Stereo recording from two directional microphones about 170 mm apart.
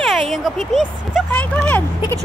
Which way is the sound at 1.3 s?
5° left (ahead or behind).